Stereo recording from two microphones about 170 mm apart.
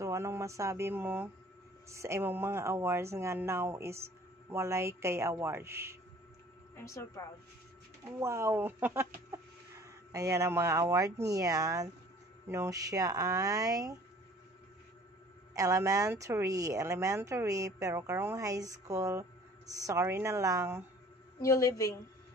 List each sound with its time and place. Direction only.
0.0 s speech: 15° right (ahead or behind)
6.8 s a woman's voice: 20° left (ahead or behind)
8.0 s speech: 15° right (ahead or behind)
15.5 s speech: 20° right (ahead or behind)
21.4 s a woman's voice: 20° left (ahead or behind)